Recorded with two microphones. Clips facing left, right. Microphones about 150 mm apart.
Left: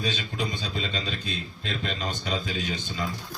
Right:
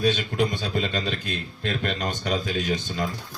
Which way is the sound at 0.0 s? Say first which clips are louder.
Right 7 dB; 55° right (ahead or behind).